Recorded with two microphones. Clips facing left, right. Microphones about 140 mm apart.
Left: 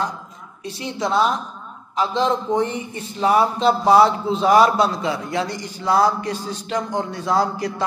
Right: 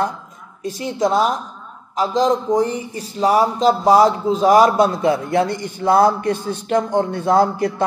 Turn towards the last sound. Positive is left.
turn(degrees=-55)  # may be behind; listen again after turning